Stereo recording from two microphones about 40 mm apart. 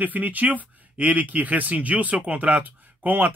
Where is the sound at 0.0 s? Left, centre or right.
Right.